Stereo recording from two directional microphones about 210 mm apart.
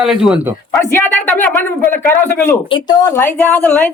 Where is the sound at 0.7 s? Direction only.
10° left (ahead or behind).